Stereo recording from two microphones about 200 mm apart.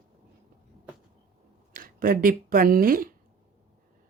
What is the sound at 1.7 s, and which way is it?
Speech, 45° right (ahead or behind).